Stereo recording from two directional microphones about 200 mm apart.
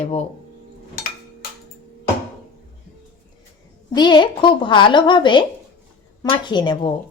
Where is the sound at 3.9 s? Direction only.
20° left (ahead or behind).